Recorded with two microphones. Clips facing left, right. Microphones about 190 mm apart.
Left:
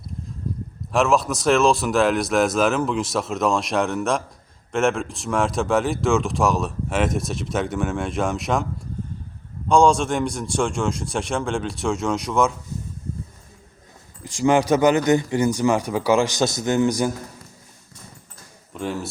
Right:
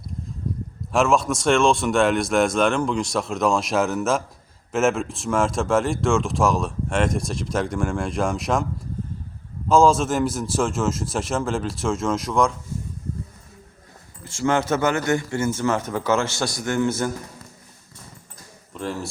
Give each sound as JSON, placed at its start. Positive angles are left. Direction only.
{"t": 0.9, "sound": "speech", "side_deg": 0}
{"t": 9.6, "sound": "speech", "side_deg": 0}
{"t": 14.3, "sound": "a man's voice", "side_deg": 15}
{"t": 18.7, "sound": "speech", "side_deg": 0}